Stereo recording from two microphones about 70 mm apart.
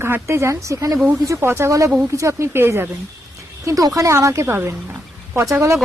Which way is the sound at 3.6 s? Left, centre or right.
Right.